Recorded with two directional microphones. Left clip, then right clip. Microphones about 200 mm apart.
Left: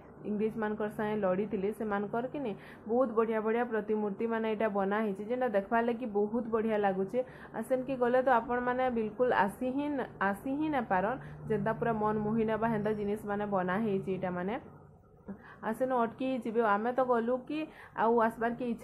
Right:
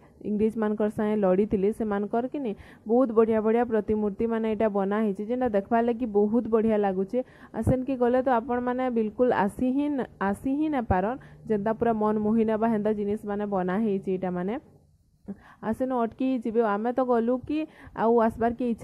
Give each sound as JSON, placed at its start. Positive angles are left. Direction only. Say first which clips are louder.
{"t": 0.2, "sound": "speech", "louder": "right 7 dB", "side_deg": -50}
{"t": 15.6, "sound": "speech", "louder": "right 3 dB", "side_deg": -45}